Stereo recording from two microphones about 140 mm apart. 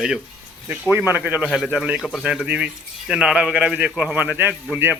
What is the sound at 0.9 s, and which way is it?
Speech, 15° right (ahead or behind).